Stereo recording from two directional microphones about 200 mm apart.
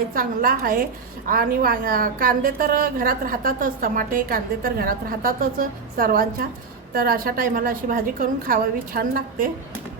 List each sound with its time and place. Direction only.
0.1 s a woman's voice: 45° right (ahead or behind)